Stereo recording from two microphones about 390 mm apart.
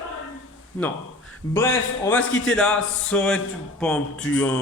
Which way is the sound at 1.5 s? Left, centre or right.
Centre.